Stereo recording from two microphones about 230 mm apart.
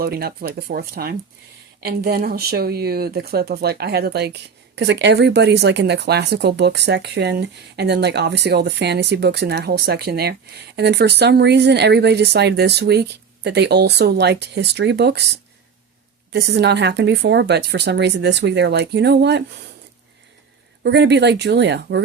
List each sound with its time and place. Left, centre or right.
0.0 s speech: right
20.8 s speech: right